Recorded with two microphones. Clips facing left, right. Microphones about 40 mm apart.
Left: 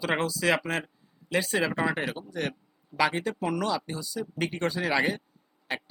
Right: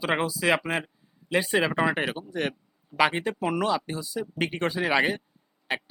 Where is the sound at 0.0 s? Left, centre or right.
Centre.